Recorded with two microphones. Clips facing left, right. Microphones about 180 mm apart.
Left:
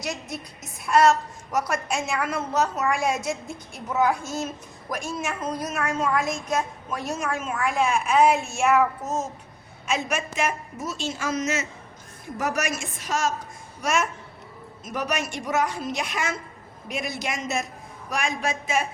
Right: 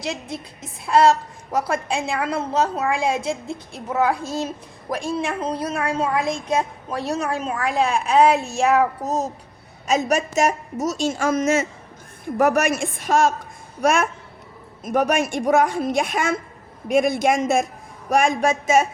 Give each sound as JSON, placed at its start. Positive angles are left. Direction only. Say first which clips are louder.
{"t": 0.0, "sound": "a woman's voice", "louder": "right 3 dB", "side_deg": -30}